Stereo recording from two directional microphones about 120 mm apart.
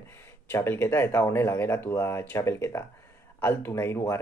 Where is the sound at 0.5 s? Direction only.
20° left (ahead or behind).